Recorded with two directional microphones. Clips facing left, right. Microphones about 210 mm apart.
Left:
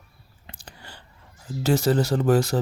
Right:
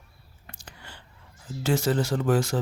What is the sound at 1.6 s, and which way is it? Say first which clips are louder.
Speech: left 3 dB; 40° left (ahead or behind).